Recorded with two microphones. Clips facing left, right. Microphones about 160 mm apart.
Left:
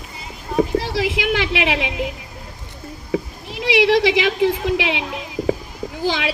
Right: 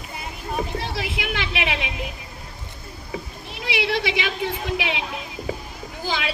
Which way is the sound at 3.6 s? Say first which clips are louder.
Left 9 dB; 90° left.